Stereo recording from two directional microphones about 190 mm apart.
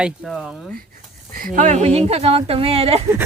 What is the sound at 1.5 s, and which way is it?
Speech, 40° right (ahead or behind).